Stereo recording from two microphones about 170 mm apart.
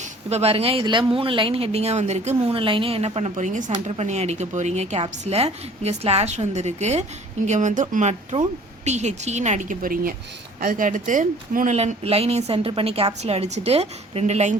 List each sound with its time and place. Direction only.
0.3 s a woman's voice: 40° right (ahead or behind)